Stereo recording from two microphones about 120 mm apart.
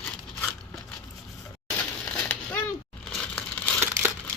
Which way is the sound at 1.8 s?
10° left (ahead or behind).